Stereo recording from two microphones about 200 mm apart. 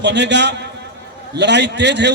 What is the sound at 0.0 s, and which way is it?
A man's voice, 60° right (ahead or behind).